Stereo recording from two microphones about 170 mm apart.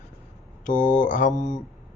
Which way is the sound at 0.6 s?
50° left (ahead or behind).